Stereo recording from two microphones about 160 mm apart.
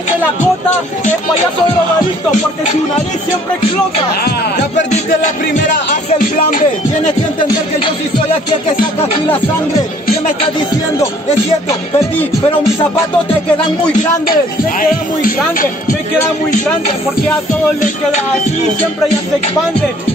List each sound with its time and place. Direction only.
4.7 s music: 50° left (ahead or behind)
5.9 s speech: 55° left (ahead or behind)
7.4 s music: 30° left (ahead or behind)
14.3 s speech: 60° left (ahead or behind)
17.8 s music: 50° left (ahead or behind)